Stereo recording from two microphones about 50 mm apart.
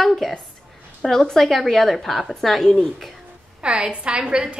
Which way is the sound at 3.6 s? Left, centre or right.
Centre.